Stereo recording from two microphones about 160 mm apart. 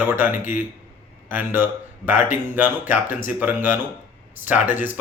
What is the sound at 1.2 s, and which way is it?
Speech, 15° right (ahead or behind).